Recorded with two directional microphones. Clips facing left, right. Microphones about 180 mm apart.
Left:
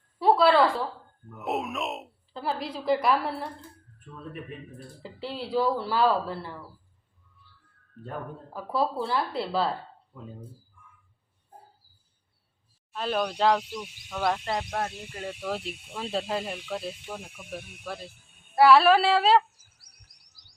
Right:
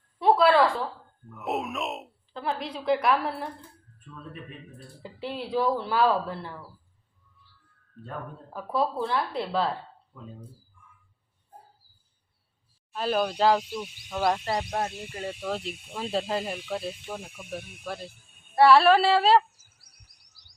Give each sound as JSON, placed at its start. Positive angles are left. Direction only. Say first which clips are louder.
{"t": 0.2, "sound": "a sound", "louder": "even", "side_deg": 0}
{"t": 1.3, "sound": "speech", "louder": "even", "side_deg": 0}
{"t": 5.2, "sound": "speech", "louder": "even", "side_deg": 0}
{"t": 8.5, "sound": "speech", "louder": "even", "side_deg": 0}
{"t": 10.1, "sound": "speech", "louder": "left 1 dB", "side_deg": 15}
{"t": 12.9, "sound": "speech", "louder": "right 2 dB", "side_deg": -5}
{"t": 14.6, "sound": "speech", "louder": "right 1 dB", "side_deg": -15}
{"t": 15.4, "sound": "speech", "louder": "right 1 dB", "side_deg": 0}
{"t": 19.8, "sound": "chirp", "louder": "even", "side_deg": 45}